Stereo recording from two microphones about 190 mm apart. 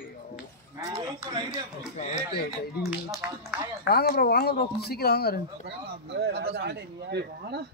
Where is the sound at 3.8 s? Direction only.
55° left (ahead or behind).